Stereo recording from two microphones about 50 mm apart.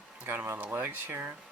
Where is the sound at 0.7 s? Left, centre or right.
Right.